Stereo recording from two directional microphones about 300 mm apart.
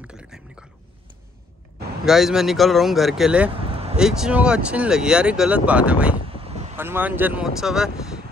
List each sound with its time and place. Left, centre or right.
0.0 s a sound: centre
2.0 s speech: centre
3.5 s vehicle: centre
3.9 s speech: centre
6.2 s vehicle: centre
6.8 s speech: centre